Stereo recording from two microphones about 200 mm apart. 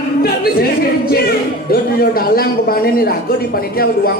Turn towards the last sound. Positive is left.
turn(degrees=50)  # may be behind; listen again after turning